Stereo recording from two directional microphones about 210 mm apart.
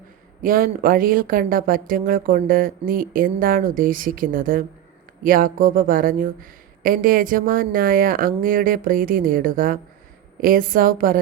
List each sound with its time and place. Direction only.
0.4 s speech: 40° right (ahead or behind)